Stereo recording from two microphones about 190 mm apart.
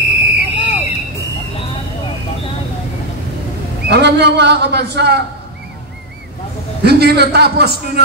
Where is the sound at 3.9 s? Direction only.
60° right (ahead or behind).